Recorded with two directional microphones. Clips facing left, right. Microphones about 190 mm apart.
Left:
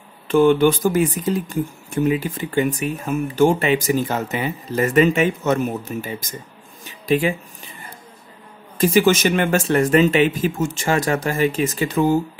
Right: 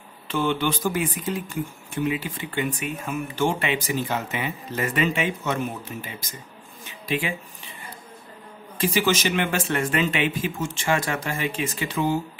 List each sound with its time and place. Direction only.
0.3 s speech: 50° left (ahead or behind)
6.9 s a sound: 40° left (ahead or behind)
8.7 s speech: 45° left (ahead or behind)